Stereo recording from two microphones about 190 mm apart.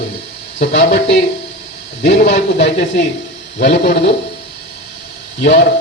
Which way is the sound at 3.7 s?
60° left (ahead or behind).